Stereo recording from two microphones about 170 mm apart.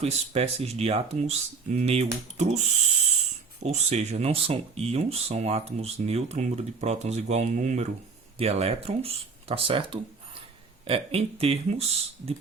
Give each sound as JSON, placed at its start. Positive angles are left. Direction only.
{"t": 0.0, "sound": "speech", "side_deg": -40}
{"t": 3.6, "sound": "speech", "side_deg": -40}